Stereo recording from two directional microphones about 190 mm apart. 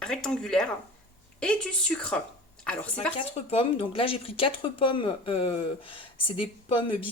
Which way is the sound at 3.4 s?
30° left (ahead or behind).